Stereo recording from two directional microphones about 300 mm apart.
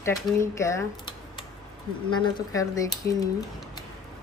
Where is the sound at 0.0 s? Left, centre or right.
Centre.